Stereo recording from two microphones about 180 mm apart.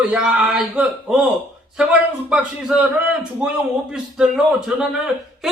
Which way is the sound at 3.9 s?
5° right (ahead or behind).